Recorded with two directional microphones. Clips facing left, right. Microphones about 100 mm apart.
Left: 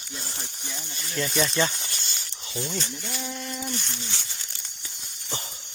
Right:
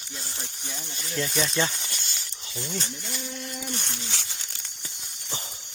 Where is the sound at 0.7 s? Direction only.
Centre (ahead or behind).